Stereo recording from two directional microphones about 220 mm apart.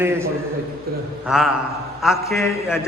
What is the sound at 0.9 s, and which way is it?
Speech, 45° right (ahead or behind).